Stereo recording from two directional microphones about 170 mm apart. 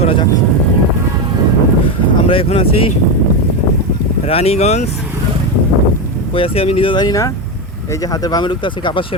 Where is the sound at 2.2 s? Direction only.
35° left (ahead or behind).